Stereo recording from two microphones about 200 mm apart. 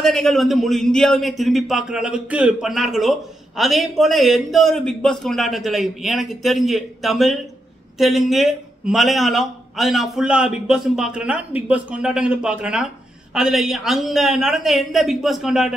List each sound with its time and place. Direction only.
0.0 s a man's voice: centre (ahead or behind)